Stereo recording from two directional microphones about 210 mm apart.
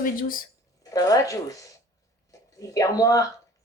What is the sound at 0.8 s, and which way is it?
Speech, 15° left (ahead or behind).